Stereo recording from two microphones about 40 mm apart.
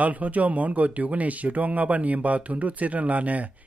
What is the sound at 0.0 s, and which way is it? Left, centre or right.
Speech, right.